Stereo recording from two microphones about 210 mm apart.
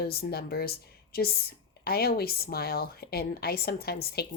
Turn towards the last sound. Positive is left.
turn(degrees=50)  # may be behind; listen again after turning